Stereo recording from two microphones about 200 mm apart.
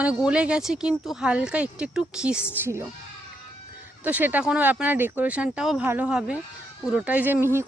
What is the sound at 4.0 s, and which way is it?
Speech, 10° right (ahead or behind).